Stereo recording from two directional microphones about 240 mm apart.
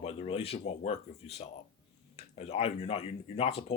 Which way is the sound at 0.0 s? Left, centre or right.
Left.